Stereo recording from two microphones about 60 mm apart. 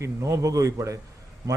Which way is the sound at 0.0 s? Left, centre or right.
Right.